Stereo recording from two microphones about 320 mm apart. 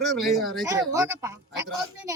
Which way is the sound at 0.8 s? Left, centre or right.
Centre.